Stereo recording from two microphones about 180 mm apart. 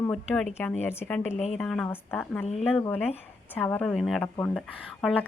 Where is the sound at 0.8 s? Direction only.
15° left (ahead or behind).